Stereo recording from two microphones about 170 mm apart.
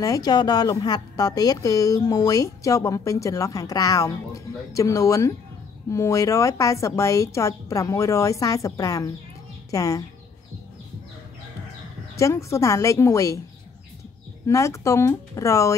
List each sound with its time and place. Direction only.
0.0 s a woman's voice: 20° left (ahead or behind)
12.2 s a woman's voice: 15° left (ahead or behind)
14.5 s a woman's voice: 15° left (ahead or behind)